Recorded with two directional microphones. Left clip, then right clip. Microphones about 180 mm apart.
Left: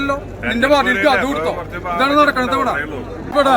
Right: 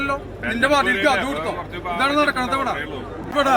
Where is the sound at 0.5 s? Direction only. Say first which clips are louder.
Left 4 dB; centre (ahead or behind).